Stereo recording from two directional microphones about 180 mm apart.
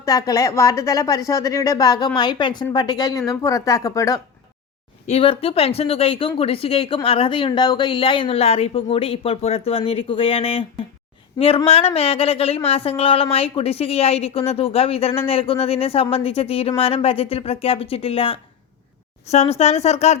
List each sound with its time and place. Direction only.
0.0 s a woman's voice: 20° left (ahead or behind)
5.0 s speech: 35° left (ahead or behind)